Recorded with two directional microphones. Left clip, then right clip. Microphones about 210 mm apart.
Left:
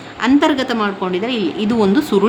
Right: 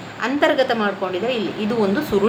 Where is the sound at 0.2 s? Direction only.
45° left (ahead or behind).